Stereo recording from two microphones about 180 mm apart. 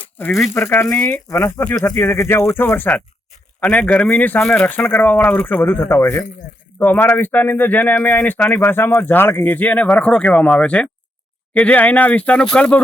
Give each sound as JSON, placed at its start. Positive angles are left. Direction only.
{"t": 0.2, "sound": "speech", "side_deg": 10}